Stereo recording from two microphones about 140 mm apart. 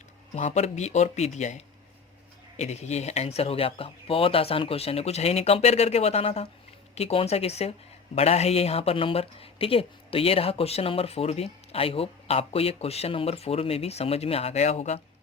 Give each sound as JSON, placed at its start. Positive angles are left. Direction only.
{"t": 0.3, "sound": "speech", "side_deg": 55}